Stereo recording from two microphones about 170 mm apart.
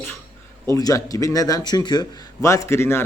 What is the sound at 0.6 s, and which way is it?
A man's voice, 20° left (ahead or behind).